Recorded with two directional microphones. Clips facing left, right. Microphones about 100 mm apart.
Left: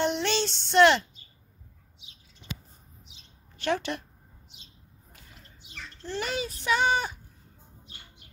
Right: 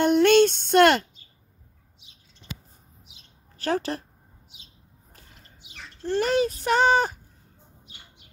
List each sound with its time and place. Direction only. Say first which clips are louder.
0.0 s a sound: right 10 dB; 50° right (ahead or behind)
3.5 s a woman's voice: right 2 dB; 40° right (ahead or behind)
6.0 s speech: right 9 dB; 50° right (ahead or behind)